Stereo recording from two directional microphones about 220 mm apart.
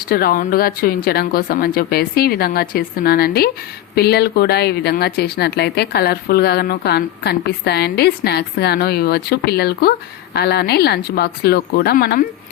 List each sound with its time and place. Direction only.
0.1 s speech: 40° left (ahead or behind)